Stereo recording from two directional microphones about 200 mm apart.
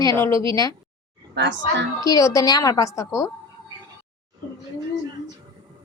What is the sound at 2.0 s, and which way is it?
Speech, 15° left (ahead or behind).